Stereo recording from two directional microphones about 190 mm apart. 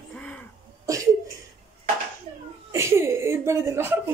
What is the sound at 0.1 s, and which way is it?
Throat clearing, 5° left (ahead or behind).